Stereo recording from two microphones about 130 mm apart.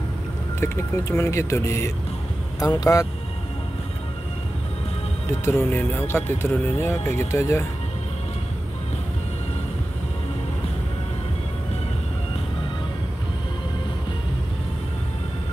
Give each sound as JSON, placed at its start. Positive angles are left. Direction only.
{"t": 0.6, "sound": "speech", "side_deg": 20}
{"t": 5.4, "sound": "speech", "side_deg": 20}